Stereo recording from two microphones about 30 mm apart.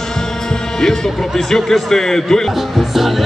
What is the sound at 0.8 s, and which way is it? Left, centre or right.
A man's voice, centre.